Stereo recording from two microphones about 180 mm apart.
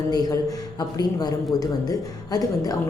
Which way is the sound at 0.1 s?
20° left (ahead or behind).